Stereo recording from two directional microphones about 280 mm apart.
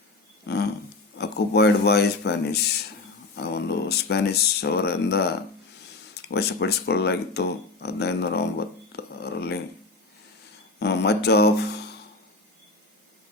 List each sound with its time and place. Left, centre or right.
0.4 s a sound: left
1.2 s speech: left
10.8 s speech: left